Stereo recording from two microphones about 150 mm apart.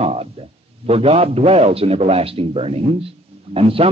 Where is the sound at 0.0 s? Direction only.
45° right (ahead or behind).